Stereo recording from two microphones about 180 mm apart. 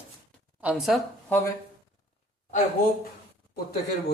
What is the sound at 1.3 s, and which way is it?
Speech, 15° left (ahead or behind).